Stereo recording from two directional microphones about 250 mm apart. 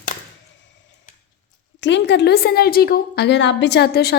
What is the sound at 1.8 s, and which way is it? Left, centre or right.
A woman's voice, left.